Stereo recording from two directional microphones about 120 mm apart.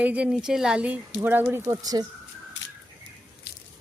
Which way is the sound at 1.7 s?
30° right (ahead or behind).